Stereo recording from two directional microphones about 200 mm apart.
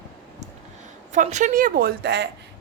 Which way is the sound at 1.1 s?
35° right (ahead or behind).